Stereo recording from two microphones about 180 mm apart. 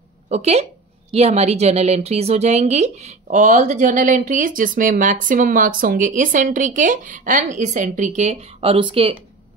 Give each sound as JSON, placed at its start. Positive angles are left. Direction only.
{"t": 0.3, "sound": "a woman's voice", "side_deg": -35}